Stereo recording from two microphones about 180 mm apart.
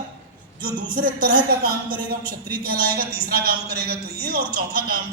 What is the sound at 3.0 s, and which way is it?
A man's voice, 55° right (ahead or behind).